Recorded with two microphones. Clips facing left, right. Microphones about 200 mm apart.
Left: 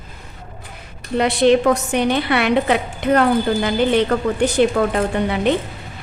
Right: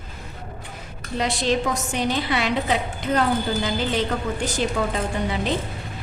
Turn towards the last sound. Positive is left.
turn(degrees=60)  # may be behind; listen again after turning